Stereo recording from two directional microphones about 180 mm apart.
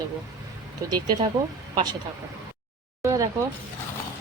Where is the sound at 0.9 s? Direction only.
25° right (ahead or behind).